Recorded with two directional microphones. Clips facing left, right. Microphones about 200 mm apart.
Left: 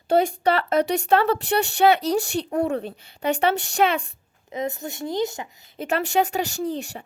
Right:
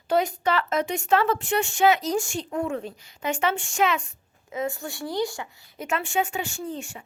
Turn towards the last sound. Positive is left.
turn(degrees=40)  # may be behind; listen again after turning